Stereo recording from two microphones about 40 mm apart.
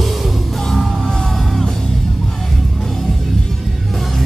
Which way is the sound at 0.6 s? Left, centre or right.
Centre.